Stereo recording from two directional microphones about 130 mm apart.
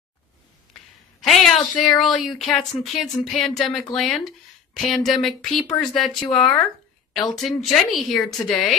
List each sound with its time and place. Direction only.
1.2 s speech: centre (ahead or behind)